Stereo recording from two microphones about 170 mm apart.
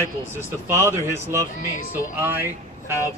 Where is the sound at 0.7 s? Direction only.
15° right (ahead or behind).